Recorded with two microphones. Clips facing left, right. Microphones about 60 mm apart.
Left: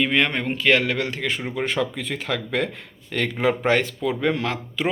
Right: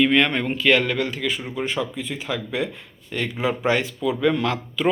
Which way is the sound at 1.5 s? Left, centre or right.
Left.